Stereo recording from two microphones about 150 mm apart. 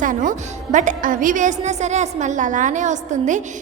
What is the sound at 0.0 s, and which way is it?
A woman's voice, 60° right (ahead or behind).